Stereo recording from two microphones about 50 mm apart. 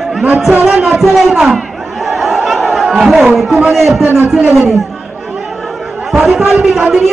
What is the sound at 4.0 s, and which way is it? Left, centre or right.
Speech, right.